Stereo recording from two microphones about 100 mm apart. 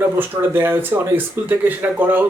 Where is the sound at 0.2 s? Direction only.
20° right (ahead or behind).